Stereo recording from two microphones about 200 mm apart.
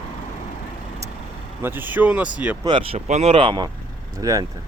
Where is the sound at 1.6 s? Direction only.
10° right (ahead or behind).